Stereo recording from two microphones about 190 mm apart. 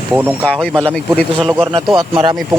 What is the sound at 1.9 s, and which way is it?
Speech, 25° right (ahead or behind).